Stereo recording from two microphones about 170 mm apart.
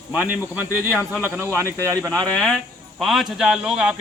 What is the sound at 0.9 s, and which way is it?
A man's voice, 15° left (ahead or behind).